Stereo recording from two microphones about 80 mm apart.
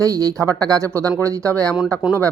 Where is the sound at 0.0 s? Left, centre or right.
Right.